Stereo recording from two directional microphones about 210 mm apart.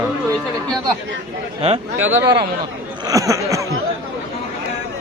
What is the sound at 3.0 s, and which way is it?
Speech, 15° right (ahead or behind).